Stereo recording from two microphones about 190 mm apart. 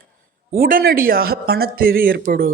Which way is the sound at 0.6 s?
50° right (ahead or behind).